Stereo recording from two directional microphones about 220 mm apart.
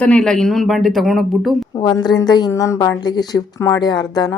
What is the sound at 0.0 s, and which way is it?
Speech, 5° left (ahead or behind).